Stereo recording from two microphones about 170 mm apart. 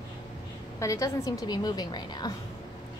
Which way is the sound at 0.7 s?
20° left (ahead or behind).